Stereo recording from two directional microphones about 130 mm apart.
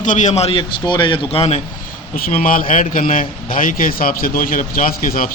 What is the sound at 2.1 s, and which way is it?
Speech, 90° left.